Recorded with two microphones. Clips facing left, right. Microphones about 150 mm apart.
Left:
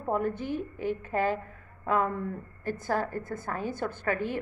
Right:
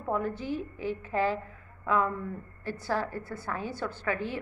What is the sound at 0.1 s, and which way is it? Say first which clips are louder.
A woman's voice: left 1 dB; 50° left (ahead or behind).